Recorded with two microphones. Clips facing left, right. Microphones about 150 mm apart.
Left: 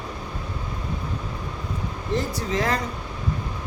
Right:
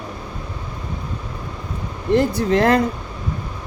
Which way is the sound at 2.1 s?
60° right (ahead or behind).